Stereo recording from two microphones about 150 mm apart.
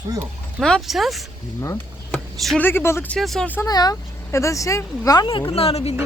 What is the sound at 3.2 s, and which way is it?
Speech, centre (ahead or behind).